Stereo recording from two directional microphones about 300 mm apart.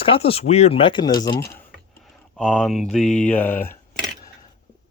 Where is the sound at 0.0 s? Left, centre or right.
Centre.